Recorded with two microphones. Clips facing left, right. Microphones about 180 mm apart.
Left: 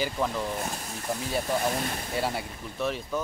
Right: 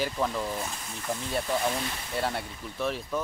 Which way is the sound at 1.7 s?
45° left (ahead or behind).